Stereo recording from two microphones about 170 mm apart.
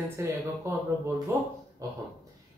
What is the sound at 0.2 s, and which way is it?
Speech, 15° right (ahead or behind).